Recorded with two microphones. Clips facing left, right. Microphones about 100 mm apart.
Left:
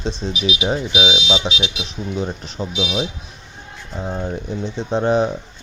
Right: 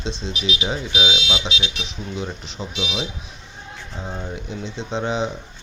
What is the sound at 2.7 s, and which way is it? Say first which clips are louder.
Speech: left 5 dB; centre (ahead or behind).